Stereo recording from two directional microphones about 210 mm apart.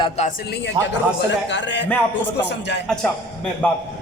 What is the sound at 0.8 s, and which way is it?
A man's voice, 60° left (ahead or behind).